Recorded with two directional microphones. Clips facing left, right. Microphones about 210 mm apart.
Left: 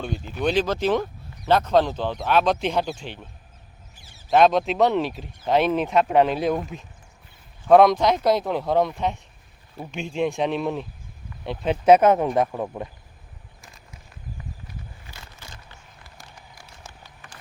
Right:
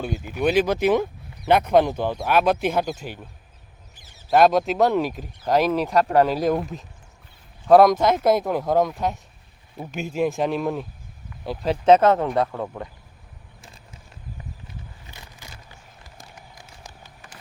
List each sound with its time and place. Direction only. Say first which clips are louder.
0.0 s speech: right 2 dB; 10° right (ahead or behind)
4.3 s speech: right 1 dB; 5° right (ahead or behind)
11.9 s speech: even; 15° left (ahead or behind)
15.0 s a sound: even; 15° right (ahead or behind)